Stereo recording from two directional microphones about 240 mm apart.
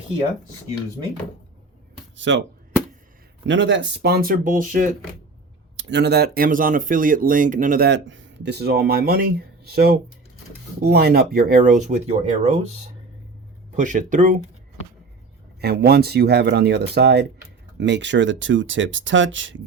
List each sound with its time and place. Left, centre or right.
2.1 s speech: right
3.4 s speech: right
5.7 s speech: right
13.7 s speech: right
15.6 s speech: right